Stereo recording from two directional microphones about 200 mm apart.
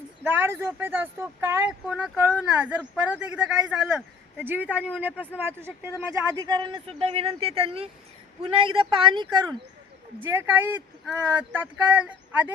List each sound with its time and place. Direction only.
0.3 s a man's voice: 10° right (ahead or behind)
10.2 s a man's voice: 10° right (ahead or behind)